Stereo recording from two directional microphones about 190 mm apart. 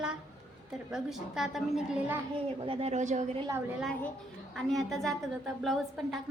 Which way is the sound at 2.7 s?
30° right (ahead or behind).